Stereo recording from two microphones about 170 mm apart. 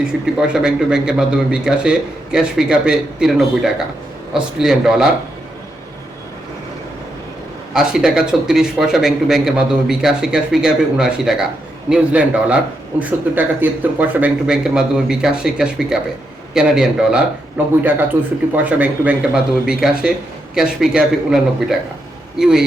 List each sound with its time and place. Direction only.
0.0 s speech: 5° right (ahead or behind)
7.7 s speech: 5° right (ahead or behind)